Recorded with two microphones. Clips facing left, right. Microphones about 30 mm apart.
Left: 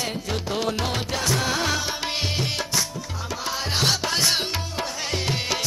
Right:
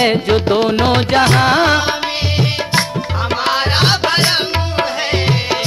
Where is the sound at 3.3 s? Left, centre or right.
Right.